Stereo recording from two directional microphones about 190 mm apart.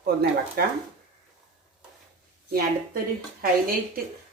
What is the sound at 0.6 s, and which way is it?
Speech, 55° right (ahead or behind).